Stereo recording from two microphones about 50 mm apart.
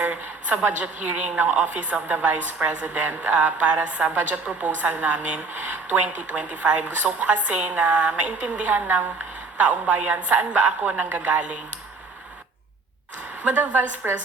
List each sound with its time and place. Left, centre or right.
0.0 s a woman's voice: right
11.1 s speech: right
13.4 s a woman's voice: right